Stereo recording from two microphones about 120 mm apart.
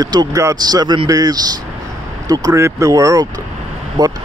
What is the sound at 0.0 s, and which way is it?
Speech, 35° right (ahead or behind).